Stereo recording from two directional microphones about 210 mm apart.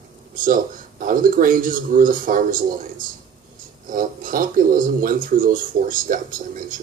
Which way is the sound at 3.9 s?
40° right (ahead or behind).